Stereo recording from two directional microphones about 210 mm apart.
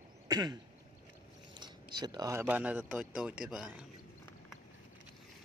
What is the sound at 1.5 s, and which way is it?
Speech, 20° right (ahead or behind).